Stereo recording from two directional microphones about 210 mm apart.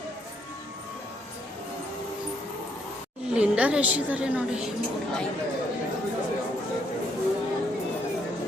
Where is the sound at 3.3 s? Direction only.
5° right (ahead or behind).